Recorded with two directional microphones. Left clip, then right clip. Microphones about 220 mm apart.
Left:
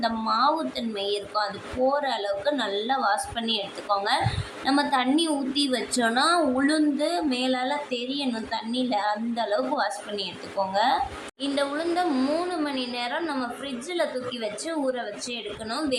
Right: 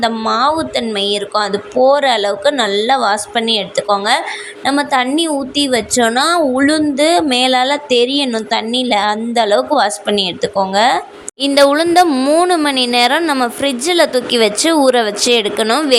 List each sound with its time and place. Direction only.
0.0 s a woman's voice: 35° right (ahead or behind)
11.4 s speech: 50° right (ahead or behind)